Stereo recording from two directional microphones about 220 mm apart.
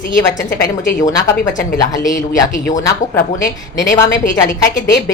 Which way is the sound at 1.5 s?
35° left (ahead or behind).